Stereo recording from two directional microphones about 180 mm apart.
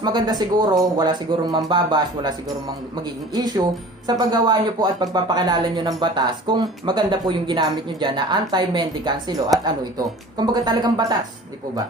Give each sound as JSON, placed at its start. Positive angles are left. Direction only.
{"t": 0.0, "sound": "speech", "side_deg": -25}
{"t": 3.3, "sound": "speech", "side_deg": -25}